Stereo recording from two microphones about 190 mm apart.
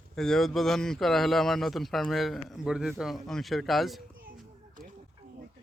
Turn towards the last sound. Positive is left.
turn(degrees=0)  # may be behind; listen again after turning